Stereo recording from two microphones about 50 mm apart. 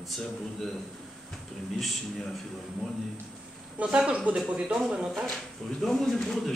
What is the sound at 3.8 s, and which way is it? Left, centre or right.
Speech, right.